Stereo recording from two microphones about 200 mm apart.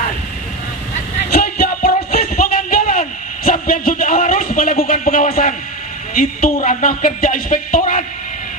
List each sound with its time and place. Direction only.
1.3 s music: 50° left (ahead or behind)
6.5 s speech: 40° left (ahead or behind)